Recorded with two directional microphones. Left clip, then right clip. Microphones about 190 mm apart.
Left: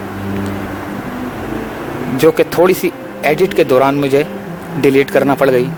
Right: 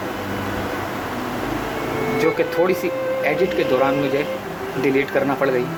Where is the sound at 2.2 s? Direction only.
50° left (ahead or behind).